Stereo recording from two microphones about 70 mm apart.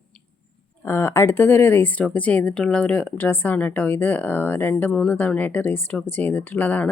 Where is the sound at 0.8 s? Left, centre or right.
Left.